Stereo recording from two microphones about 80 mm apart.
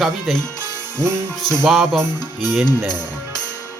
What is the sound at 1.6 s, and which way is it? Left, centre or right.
Speech, centre.